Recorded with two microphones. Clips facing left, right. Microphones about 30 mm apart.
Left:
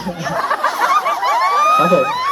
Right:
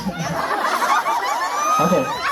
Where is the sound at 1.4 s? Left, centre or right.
Left.